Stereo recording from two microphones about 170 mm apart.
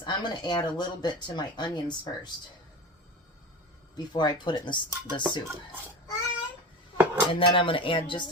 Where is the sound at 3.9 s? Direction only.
25° left (ahead or behind).